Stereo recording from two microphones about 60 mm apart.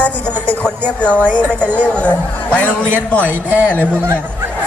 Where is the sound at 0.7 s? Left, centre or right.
Right.